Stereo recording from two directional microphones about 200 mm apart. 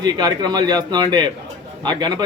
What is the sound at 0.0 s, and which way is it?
A man's voice, 20° right (ahead or behind).